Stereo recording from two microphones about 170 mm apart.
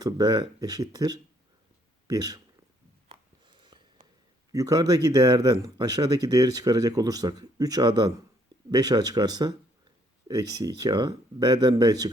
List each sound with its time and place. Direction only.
0.0 s speech: 25° right (ahead or behind)
3.4 s a sound: 25° right (ahead or behind)
4.5 s speech: 20° right (ahead or behind)